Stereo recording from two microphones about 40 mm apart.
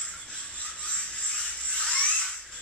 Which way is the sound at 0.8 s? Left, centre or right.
Centre.